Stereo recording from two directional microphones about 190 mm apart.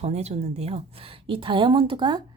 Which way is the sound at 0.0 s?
35° right (ahead or behind).